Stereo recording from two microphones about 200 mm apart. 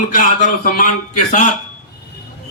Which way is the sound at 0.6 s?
45° left (ahead or behind).